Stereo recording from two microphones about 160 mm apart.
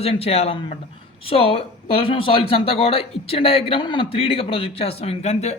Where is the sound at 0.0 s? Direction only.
40° left (ahead or behind).